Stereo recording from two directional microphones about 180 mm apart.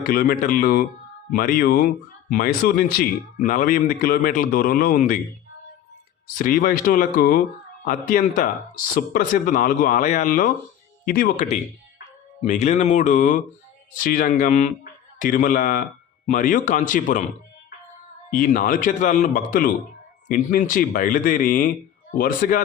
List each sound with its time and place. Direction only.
0.0 s speech: 55° left (ahead or behind)
6.2 s speech: 50° left (ahead or behind)
12.4 s speech: 40° left (ahead or behind)
18.3 s speech: 50° left (ahead or behind)